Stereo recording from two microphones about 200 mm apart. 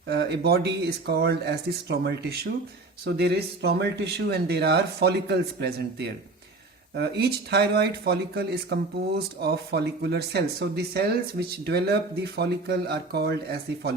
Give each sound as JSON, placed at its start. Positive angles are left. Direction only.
{"t": 0.1, "sound": "speech", "side_deg": -55}